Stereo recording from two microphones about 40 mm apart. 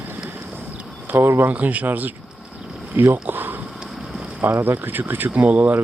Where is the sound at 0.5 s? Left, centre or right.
Right.